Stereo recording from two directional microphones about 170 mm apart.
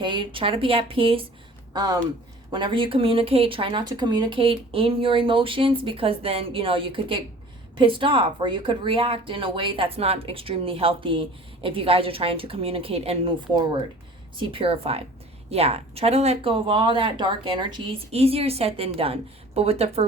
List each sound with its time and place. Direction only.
0.0 s speech: 30° right (ahead or behind)